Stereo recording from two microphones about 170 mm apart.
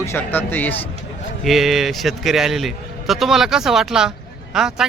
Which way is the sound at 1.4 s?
Centre (ahead or behind).